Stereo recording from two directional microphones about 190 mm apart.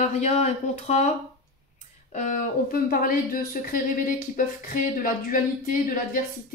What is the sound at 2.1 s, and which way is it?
Speech, 40° left (ahead or behind).